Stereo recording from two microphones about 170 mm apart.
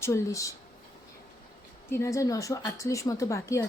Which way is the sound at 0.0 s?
20° left (ahead or behind).